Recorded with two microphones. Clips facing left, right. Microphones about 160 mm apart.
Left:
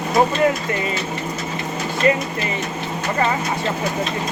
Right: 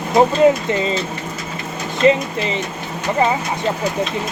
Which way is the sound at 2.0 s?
20° right (ahead or behind).